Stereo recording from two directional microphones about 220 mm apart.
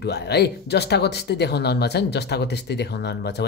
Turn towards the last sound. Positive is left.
turn(degrees=50)  # may be behind; listen again after turning